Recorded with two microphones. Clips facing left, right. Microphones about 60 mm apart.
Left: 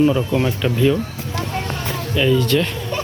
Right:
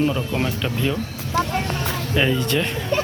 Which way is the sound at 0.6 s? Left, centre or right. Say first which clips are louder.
Left 6 dB; centre.